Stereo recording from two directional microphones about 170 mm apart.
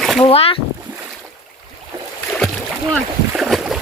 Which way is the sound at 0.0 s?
Centre (ahead or behind).